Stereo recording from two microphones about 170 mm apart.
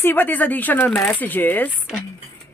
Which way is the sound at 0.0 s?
10° left (ahead or behind).